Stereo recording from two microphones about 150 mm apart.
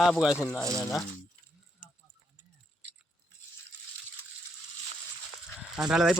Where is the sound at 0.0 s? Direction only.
Centre (ahead or behind).